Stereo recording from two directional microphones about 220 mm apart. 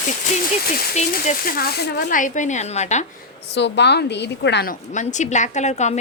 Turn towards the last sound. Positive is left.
turn(degrees=30)  # may be behind; listen again after turning